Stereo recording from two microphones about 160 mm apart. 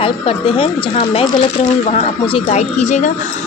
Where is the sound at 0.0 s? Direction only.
35° left (ahead or behind).